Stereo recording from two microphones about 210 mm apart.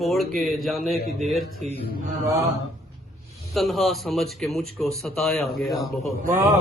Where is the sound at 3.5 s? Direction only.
Centre (ahead or behind).